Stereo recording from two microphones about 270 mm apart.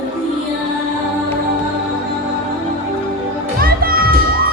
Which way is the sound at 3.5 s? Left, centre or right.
Right.